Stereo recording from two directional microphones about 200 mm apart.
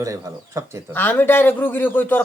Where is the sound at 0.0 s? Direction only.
15° right (ahead or behind).